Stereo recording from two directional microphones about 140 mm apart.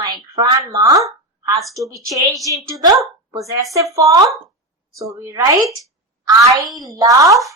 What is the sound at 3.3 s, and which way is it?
A woman's voice, 25° right (ahead or behind).